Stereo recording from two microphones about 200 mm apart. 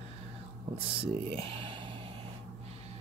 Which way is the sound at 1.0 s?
25° right (ahead or behind).